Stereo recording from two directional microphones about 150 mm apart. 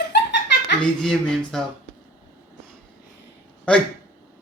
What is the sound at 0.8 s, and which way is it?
Speech, 5° left (ahead or behind).